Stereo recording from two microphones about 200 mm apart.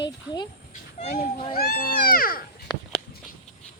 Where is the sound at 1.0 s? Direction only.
35° left (ahead or behind).